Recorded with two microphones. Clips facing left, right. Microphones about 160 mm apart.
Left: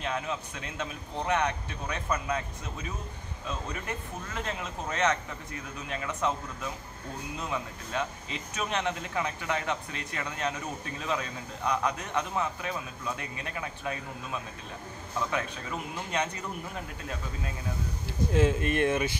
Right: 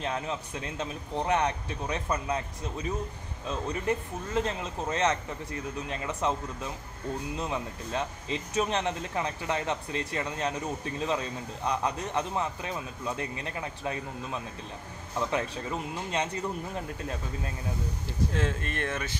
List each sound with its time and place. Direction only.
0.0 s speech: 30° right (ahead or behind)
7.3 s speech: 30° right (ahead or behind)
15.3 s speech: 30° right (ahead or behind)
18.3 s speech: 10° left (ahead or behind)